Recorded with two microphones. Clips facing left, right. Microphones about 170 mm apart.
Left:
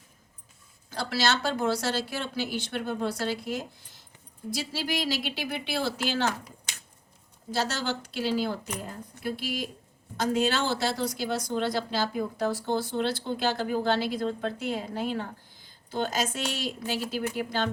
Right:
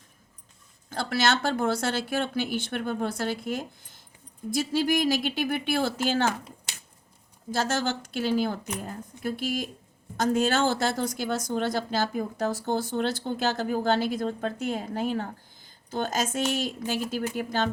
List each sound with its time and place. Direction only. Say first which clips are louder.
0.9 s speech: right 2 dB; 55° right (ahead or behind)
7.5 s speech: right 2 dB; 50° right (ahead or behind)